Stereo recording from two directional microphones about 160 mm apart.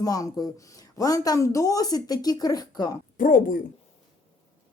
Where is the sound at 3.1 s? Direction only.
60° left (ahead or behind).